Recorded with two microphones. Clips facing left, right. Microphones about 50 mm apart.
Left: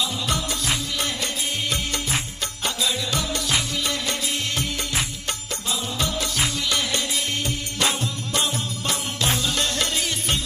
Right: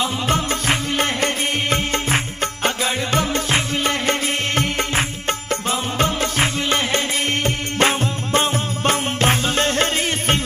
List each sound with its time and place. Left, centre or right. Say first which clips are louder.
0.0 s music: right 5 dB; right